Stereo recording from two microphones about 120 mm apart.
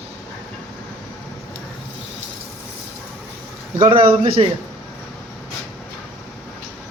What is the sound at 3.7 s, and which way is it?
Speech, 45° right (ahead or behind).